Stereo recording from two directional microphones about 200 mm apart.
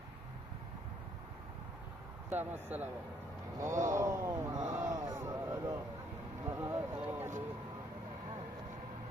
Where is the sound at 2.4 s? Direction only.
10° right (ahead or behind).